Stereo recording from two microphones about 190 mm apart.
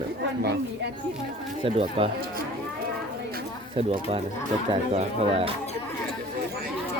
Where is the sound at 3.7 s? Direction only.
30° right (ahead or behind).